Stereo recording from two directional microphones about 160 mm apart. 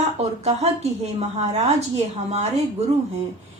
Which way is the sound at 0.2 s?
40° right (ahead or behind).